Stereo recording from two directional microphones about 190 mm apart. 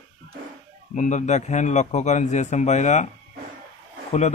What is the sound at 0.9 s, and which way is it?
Speech, 40° left (ahead or behind).